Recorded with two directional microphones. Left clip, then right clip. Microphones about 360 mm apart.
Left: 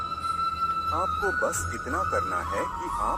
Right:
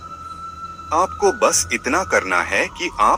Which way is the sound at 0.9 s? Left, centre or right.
Right.